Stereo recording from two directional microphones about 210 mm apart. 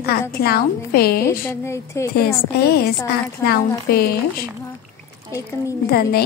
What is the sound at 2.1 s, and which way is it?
A woman's voice, 50° left (ahead or behind).